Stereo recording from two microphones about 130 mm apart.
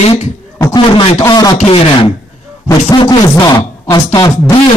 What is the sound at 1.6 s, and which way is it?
Speech, 45° left (ahead or behind).